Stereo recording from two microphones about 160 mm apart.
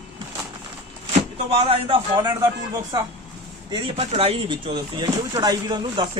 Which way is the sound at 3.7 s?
35° right (ahead or behind).